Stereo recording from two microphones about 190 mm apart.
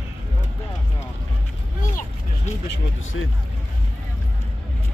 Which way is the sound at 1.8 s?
45° left (ahead or behind).